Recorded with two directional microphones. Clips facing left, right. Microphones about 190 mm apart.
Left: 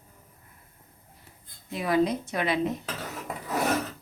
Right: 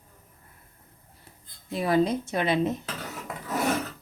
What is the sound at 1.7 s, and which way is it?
Speech, 30° right (ahead or behind).